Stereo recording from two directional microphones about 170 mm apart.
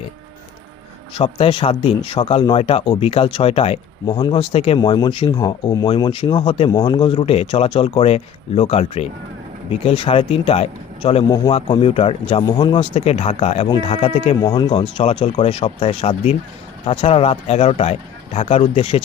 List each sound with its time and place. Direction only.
1.1 s speech: 30° left (ahead or behind)